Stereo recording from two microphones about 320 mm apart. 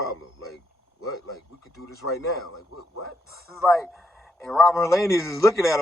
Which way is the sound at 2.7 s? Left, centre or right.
Left.